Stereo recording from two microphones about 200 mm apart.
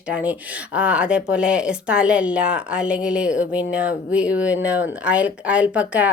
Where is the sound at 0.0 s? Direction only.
5° right (ahead or behind).